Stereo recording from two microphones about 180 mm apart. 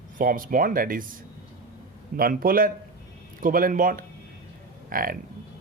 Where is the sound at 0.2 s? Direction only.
50° right (ahead or behind).